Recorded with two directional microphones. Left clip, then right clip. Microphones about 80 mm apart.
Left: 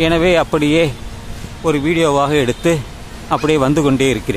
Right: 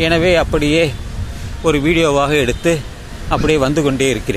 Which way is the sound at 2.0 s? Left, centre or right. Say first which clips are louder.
Left 2 dB; centre.